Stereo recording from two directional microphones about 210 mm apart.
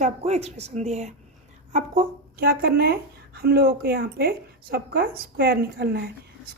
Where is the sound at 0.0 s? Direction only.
30° right (ahead or behind).